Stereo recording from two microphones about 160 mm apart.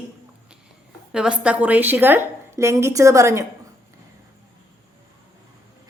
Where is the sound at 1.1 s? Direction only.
5° right (ahead or behind).